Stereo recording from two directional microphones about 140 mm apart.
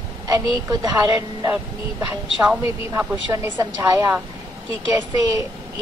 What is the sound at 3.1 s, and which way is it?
A woman's voice, 25° right (ahead or behind).